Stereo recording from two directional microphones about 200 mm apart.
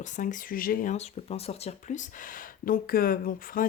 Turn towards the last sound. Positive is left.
turn(degrees=45)  # may be behind; listen again after turning